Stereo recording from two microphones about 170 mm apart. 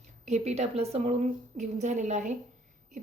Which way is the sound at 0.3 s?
40° right (ahead or behind).